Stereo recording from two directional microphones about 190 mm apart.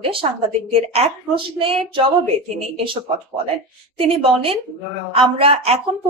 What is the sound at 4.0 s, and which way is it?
A woman's voice, 30° right (ahead or behind).